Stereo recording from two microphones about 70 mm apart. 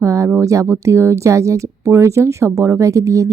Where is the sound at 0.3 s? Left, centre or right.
Right.